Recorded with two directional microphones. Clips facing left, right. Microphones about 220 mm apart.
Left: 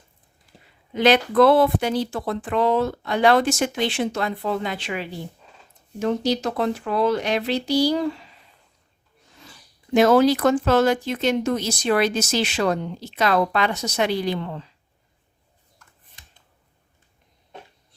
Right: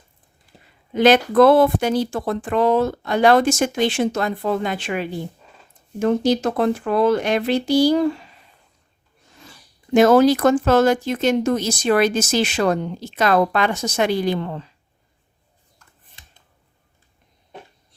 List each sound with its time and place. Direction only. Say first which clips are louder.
0.9 s speech: right 3 dB; 45° right (ahead or behind)
9.9 s speech: right 3 dB; 45° right (ahead or behind)